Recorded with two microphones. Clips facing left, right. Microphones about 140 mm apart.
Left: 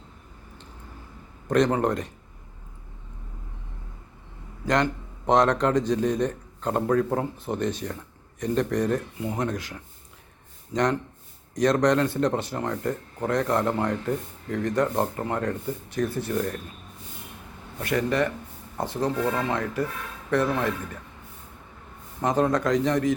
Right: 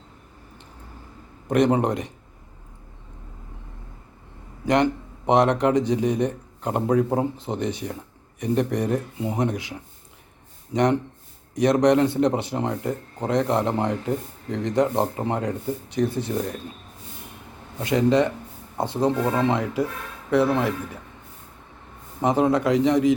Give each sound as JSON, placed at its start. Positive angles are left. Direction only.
{"t": 1.5, "sound": "a man's voice", "side_deg": -15}
{"t": 4.6, "sound": "a man's voice", "side_deg": -15}
{"t": 17.7, "sound": "a man's voice", "side_deg": -20}
{"t": 22.2, "sound": "a man's voice", "side_deg": -15}